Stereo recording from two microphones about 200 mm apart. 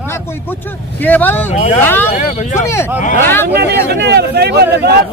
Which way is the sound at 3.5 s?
55° right (ahead or behind).